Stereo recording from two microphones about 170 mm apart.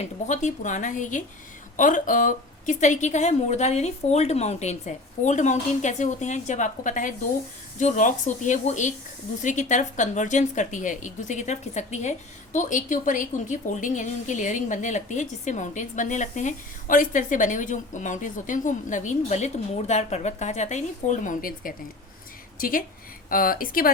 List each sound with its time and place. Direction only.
0.0 s a woman's voice: 45° left (ahead or behind)